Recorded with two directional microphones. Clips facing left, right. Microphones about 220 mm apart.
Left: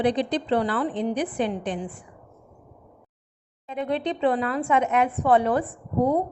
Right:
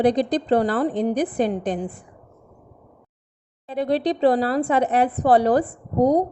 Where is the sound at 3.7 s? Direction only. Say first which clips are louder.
Right 5 dB; 35° right (ahead or behind).